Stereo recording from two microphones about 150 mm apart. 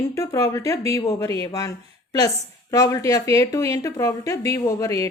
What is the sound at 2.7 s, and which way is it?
Speech, 25° left (ahead or behind).